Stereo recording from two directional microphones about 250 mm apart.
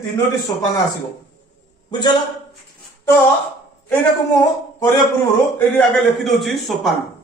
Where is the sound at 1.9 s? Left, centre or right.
Centre.